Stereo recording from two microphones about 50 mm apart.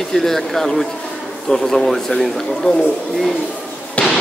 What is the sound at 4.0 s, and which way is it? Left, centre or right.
Fireworks, left.